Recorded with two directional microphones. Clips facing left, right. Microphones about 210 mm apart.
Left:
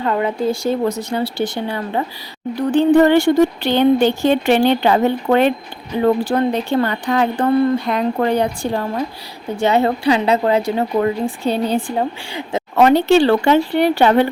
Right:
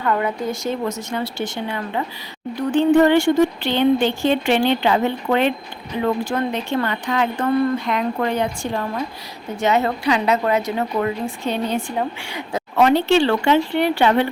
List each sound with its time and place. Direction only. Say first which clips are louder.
0.0 s a woman's voice: left 3 dB; 25° left (ahead or behind)
12.7 s a woman's voice: left 3 dB; 45° left (ahead or behind)